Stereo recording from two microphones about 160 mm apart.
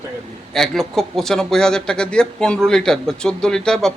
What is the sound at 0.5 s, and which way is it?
Speech, centre (ahead or behind).